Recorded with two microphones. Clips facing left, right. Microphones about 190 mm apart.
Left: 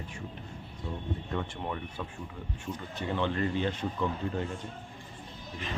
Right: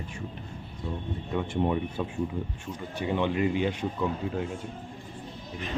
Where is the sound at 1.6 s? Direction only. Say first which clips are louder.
Right 9 dB; 15° right (ahead or behind).